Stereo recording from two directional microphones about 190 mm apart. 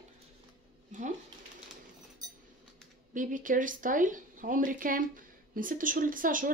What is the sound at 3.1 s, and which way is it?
Speech, 45° right (ahead or behind).